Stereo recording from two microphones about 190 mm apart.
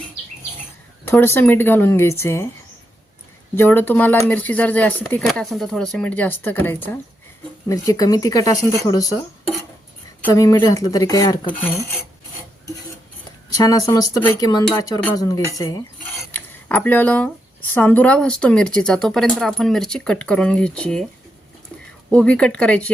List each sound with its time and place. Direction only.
1.0 s speech: 10° left (ahead or behind)
3.5 s speech: 10° left (ahead or behind)
10.2 s speech: 15° left (ahead or behind)
13.6 s speech: 20° left (ahead or behind)
22.1 s speech: 5° left (ahead or behind)